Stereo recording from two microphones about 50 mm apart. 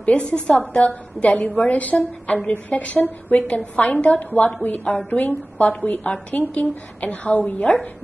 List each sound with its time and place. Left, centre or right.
0.0 s a woman's voice: left
6.3 s a woman's voice: left